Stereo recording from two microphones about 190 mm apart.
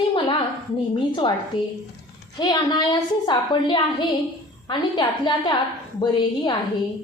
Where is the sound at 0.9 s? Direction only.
25° left (ahead or behind).